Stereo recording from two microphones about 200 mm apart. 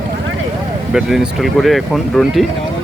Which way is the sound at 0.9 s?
Centre (ahead or behind).